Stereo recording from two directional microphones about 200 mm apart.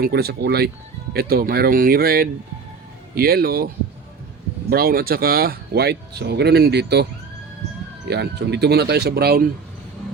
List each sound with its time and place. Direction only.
0.0 s speech: 50° right (ahead or behind)
4.7 s speech: 50° right (ahead or behind)